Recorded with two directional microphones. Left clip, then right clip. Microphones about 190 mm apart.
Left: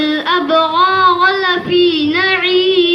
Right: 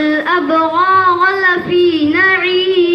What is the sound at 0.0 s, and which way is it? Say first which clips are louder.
Child singing: right 1 dB; 30° left (ahead or behind).